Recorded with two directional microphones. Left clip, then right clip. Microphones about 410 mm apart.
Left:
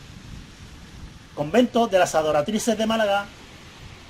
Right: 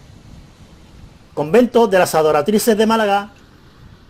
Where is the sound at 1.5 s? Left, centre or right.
Right.